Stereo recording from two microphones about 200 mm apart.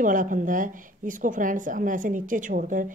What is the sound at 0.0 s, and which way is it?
A woman's voice, 40° right (ahead or behind).